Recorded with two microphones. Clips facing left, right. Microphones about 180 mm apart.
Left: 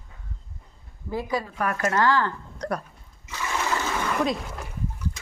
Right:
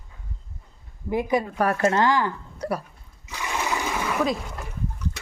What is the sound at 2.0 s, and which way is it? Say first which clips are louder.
Speech: right 1 dB; 15° right (ahead or behind).